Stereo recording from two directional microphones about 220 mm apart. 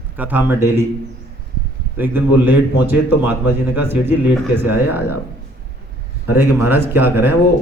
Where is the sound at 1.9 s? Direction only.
10° right (ahead or behind).